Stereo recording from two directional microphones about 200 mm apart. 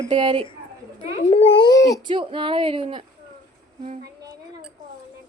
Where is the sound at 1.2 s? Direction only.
30° left (ahead or behind).